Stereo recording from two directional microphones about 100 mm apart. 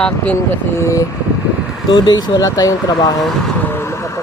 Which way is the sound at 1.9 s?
45° left (ahead or behind).